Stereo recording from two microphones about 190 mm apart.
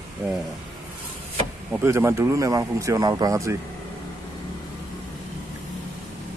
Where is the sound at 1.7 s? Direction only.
10° right (ahead or behind).